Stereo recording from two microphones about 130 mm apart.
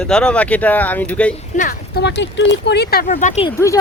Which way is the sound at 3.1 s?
65° left (ahead or behind).